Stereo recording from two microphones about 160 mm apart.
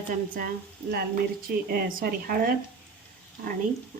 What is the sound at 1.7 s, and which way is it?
Speech, 60° right (ahead or behind).